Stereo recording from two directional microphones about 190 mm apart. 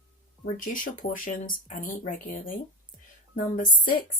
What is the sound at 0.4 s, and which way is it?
Speech, 45° left (ahead or behind).